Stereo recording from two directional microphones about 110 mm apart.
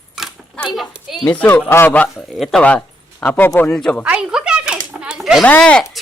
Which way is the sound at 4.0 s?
10° right (ahead or behind).